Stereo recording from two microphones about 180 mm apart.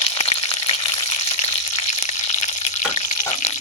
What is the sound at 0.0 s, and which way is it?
Frying, 35° left (ahead or behind).